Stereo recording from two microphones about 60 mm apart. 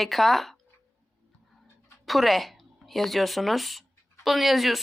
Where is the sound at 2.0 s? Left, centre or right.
Centre.